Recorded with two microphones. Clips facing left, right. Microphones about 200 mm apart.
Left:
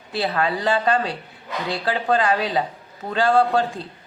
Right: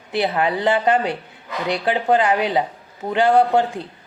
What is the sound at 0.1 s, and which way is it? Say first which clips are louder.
A man's voice: right 3 dB; 20° right (ahead or behind).